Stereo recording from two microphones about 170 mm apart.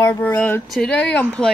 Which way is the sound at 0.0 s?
15° left (ahead or behind).